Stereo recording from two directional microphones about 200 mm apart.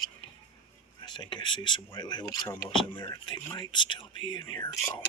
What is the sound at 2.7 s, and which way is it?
Speech, 25° left (ahead or behind).